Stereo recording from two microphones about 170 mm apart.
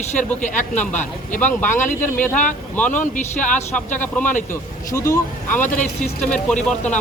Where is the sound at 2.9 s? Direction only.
50° left (ahead or behind).